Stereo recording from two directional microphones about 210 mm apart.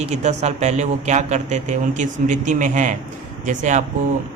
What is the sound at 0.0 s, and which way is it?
Speech, 35° right (ahead or behind).